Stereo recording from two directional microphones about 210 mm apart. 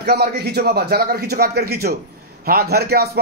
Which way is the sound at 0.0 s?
50° right (ahead or behind).